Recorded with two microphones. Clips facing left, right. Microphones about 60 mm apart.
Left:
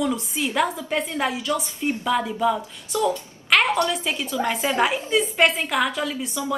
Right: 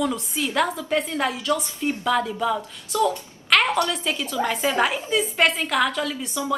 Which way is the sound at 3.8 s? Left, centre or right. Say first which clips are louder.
Left 1 dB; centre.